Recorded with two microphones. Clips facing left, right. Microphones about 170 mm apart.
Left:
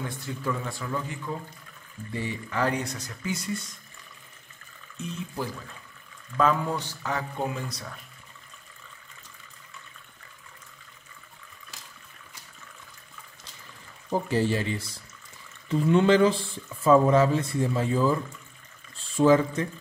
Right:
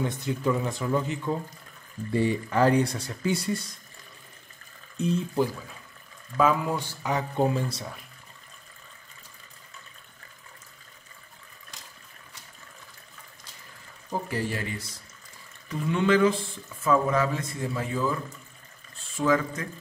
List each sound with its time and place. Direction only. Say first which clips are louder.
0.0 s speech: right 5 dB; 20° right (ahead or behind)
2.1 s speech: right 6 dB; 35° right (ahead or behind)
4.9 s speech: right 9 dB; 35° right (ahead or behind)
6.3 s speech: right 1 dB; 5° right (ahead or behind)
7.3 s speech: right 6 dB; 30° right (ahead or behind)
14.3 s speech: left 7 dB; 25° left (ahead or behind)